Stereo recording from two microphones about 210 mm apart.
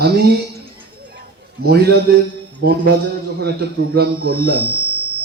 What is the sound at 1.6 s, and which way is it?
A man's voice, 50° right (ahead or behind).